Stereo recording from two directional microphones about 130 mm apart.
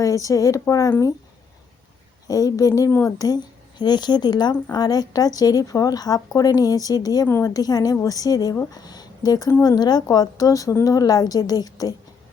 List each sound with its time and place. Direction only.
0.0 s a woman's voice: 25° left (ahead or behind)
2.2 s a woman's voice: 25° left (ahead or behind)